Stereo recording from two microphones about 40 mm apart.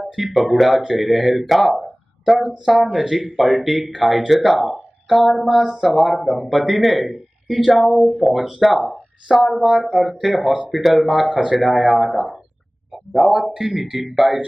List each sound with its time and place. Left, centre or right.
0.0 s speech: centre
11.3 s speech: right
11.5 s speech: centre